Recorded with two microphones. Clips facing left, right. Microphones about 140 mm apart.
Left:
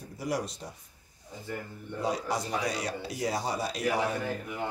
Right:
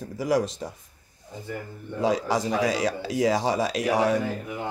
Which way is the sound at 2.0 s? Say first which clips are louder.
Right 7 dB; 90° right.